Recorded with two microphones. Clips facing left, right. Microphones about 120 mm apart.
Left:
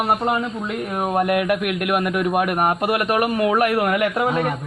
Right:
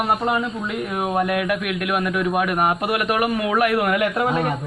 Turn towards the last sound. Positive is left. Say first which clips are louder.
# left 1 dB
turn(degrees=25)  # may be behind; listen again after turning